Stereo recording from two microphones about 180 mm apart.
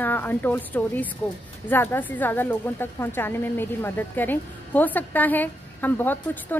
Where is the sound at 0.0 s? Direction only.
10° left (ahead or behind).